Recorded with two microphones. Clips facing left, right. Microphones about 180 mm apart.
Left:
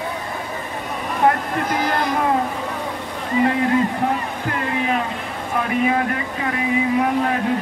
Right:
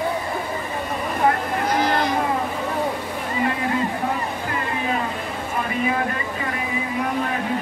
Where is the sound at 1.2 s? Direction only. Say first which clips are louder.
Left 3 dB; 65° left (ahead or behind).